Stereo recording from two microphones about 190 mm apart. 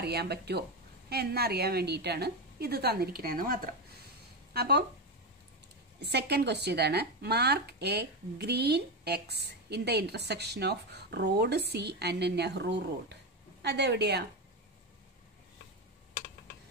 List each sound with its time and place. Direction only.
0.0 s speech: 55° right (ahead or behind)
4.6 s speech: 60° right (ahead or behind)
5.9 s speech: 60° right (ahead or behind)